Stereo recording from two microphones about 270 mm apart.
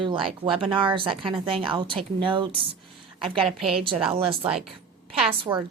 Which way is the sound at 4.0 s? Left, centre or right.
Right.